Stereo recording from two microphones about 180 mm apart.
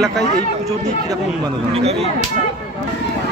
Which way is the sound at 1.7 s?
35° right (ahead or behind).